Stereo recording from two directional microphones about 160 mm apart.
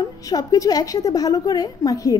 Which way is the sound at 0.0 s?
25° left (ahead or behind).